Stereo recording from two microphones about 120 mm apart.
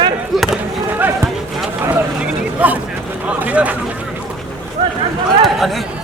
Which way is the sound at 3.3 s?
10° right (ahead or behind).